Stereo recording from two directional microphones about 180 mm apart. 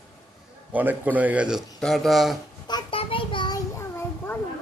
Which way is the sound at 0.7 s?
10° right (ahead or behind).